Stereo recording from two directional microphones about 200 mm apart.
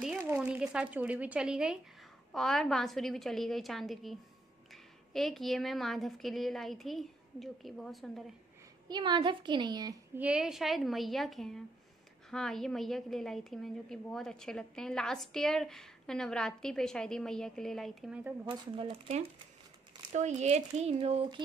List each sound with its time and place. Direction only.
0.0 s a woman's voice: 5° right (ahead or behind)
8.8 s a woman's voice: 20° right (ahead or behind)
10.1 s a woman's voice: 5° right (ahead or behind)
18.5 s a woman's voice: 30° right (ahead or behind)